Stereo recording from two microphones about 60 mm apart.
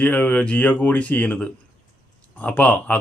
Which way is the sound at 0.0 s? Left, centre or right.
Left.